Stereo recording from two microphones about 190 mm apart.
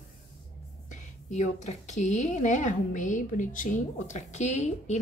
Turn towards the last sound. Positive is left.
turn(degrees=35)  # may be behind; listen again after turning